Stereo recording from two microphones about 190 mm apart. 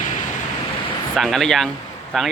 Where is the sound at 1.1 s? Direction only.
Centre (ahead or behind).